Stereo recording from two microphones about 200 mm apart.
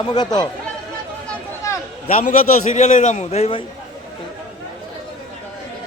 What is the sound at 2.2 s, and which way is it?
A man's voice, 40° left (ahead or behind).